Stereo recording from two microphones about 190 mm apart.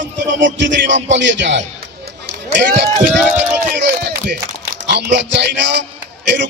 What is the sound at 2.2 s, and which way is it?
Run, 55° right (ahead or behind).